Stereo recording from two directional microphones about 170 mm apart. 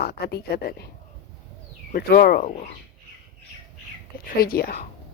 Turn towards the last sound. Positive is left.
turn(degrees=65)  # may be behind; listen again after turning